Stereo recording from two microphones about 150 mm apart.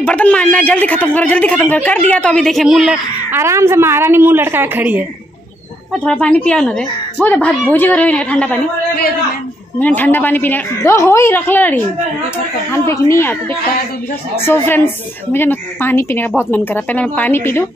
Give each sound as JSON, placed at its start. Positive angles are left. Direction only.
{"t": 0.0, "sound": "a woman's voice", "side_deg": 10}
{"t": 3.3, "sound": "a woman's voice", "side_deg": -15}
{"t": 6.0, "sound": "a woman's voice", "side_deg": 5}
{"t": 9.8, "sound": "a woman's voice", "side_deg": 10}